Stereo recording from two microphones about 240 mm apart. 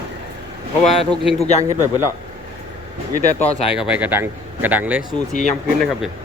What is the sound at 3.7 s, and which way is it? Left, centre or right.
Speech, centre.